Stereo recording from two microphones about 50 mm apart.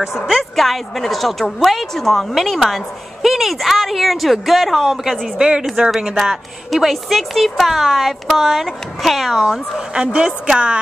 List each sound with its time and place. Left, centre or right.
0.4 s a woman's voice: centre
5.4 s speech: centre
6.1 s a woman's voice: centre
10.1 s a woman's voice: centre